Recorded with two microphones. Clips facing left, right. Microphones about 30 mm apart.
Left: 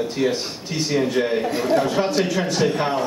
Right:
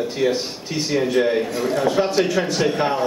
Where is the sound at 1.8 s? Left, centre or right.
Centre.